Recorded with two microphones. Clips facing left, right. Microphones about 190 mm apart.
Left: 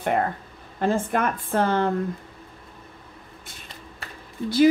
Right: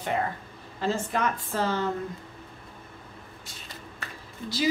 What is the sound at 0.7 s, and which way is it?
Speech, 55° left (ahead or behind).